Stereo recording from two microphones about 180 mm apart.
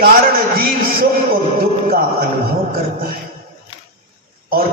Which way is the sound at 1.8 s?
55° right (ahead or behind).